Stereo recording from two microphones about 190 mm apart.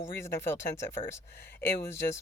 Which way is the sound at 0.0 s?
15° left (ahead or behind).